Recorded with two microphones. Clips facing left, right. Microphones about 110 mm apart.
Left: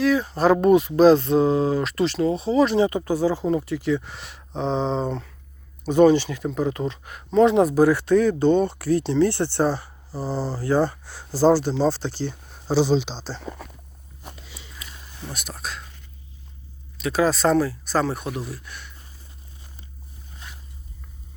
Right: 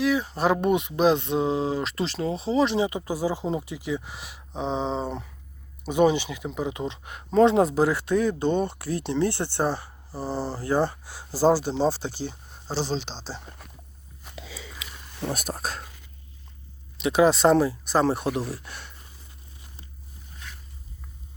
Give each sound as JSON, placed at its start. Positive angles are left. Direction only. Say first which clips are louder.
{"t": 0.0, "sound": "speech", "louder": "left 4 dB", "side_deg": -20}
{"t": 2.9, "sound": "speech", "louder": "left 5 dB", "side_deg": -10}
{"t": 12.6, "sound": "speech", "louder": "left 9 dB", "side_deg": 10}
{"t": 14.3, "sound": "a sound", "louder": "right 4 dB", "side_deg": -90}
{"t": 15.3, "sound": "speech", "louder": "right 3 dB", "side_deg": -45}
{"t": 17.0, "sound": "speech", "louder": "right 2 dB", "side_deg": -20}